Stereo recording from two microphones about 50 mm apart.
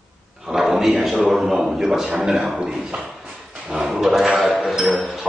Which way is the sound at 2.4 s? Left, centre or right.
Right.